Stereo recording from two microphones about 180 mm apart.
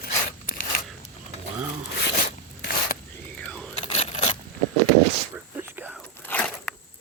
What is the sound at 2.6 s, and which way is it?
Mechanisms, 55° left (ahead or behind).